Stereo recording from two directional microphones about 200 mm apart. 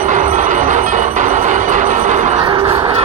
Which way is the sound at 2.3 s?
20° right (ahead or behind).